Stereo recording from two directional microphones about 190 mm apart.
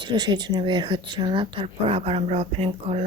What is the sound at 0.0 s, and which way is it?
Speech, 25° right (ahead or behind).